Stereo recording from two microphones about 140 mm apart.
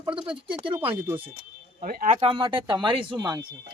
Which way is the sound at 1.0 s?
15° right (ahead or behind).